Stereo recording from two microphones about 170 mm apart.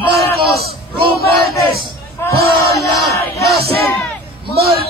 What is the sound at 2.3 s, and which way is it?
Speech, 65° right (ahead or behind).